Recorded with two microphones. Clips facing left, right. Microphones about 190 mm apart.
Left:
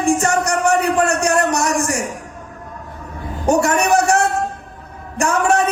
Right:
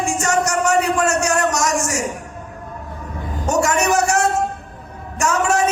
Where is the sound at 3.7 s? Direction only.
60° left (ahead or behind).